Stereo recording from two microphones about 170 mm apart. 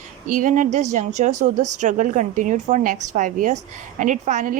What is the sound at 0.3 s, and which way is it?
A woman's voice, 50° right (ahead or behind).